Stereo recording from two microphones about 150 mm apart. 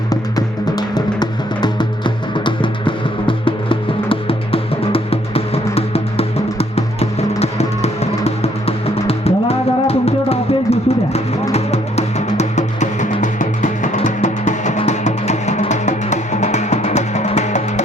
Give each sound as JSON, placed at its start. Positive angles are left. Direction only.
{"t": 0.1, "sound": "music", "side_deg": 25}